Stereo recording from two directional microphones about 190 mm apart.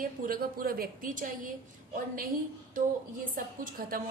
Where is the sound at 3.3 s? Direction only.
45° right (ahead or behind).